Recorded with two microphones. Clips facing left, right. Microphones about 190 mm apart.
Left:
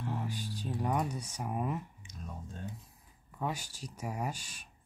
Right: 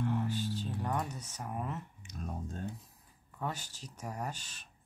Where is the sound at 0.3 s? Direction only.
15° left (ahead or behind).